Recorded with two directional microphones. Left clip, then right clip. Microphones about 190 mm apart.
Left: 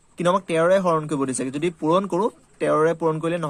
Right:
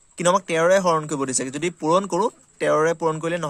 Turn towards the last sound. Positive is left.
turn(degrees=-30)  # may be behind; listen again after turning